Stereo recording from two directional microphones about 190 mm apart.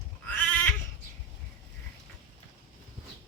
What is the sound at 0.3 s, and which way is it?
Goat, 10° left (ahead or behind).